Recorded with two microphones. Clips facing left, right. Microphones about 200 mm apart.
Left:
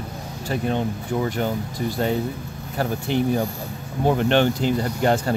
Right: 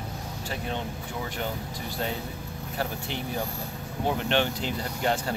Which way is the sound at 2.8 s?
50° left (ahead or behind).